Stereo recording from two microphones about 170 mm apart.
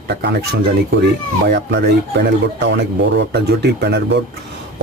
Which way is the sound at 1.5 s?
80° right.